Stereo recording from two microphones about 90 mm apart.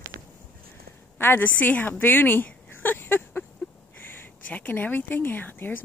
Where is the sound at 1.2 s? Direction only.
20° left (ahead or behind).